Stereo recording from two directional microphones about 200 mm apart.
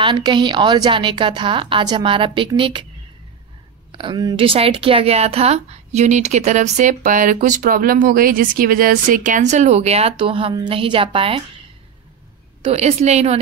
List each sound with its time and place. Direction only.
0.0 s a woman's voice: 25° right (ahead or behind)
3.9 s speech: 25° right (ahead or behind)
12.6 s speech: 30° right (ahead or behind)